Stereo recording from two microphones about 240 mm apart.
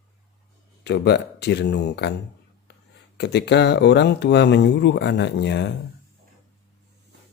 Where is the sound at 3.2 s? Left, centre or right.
Left.